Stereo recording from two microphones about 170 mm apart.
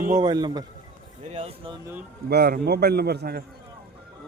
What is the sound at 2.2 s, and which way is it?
A man's voice, 70° right (ahead or behind).